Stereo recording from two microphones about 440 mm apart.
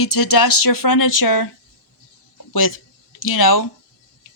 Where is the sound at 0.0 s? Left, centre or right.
Left.